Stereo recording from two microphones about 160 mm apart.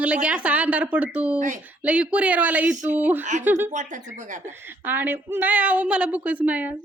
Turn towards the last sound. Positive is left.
turn(degrees=-10)  # may be behind; listen again after turning